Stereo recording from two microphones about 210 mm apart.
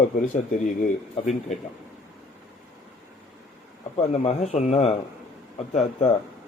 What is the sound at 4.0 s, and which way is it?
A man's voice, 30° left (ahead or behind).